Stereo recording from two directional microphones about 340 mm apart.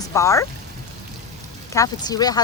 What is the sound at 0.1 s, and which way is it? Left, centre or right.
Speech, centre.